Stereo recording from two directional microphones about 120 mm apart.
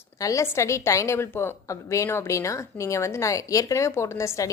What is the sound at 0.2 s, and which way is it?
A woman's voice, 25° left (ahead or behind).